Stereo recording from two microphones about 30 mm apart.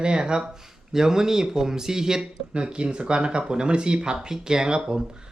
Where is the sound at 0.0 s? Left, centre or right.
Right.